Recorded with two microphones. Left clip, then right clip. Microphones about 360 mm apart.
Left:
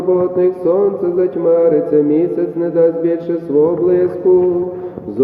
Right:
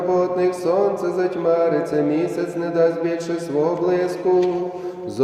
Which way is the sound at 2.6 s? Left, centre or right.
Right.